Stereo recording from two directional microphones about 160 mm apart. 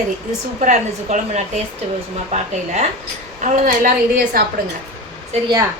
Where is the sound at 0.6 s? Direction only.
50° right (ahead or behind).